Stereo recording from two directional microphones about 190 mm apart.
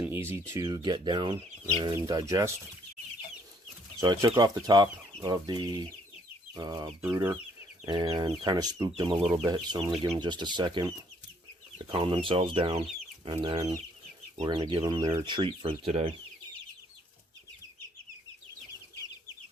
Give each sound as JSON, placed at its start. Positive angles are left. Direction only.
{"t": 0.0, "sound": "speech", "side_deg": -10}
{"t": 4.0, "sound": "speech", "side_deg": -20}
{"t": 6.5, "sound": "chicken", "side_deg": -20}
{"t": 7.9, "sound": "speech", "side_deg": -20}